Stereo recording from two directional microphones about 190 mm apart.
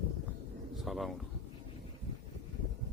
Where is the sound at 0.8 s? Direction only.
Centre (ahead or behind).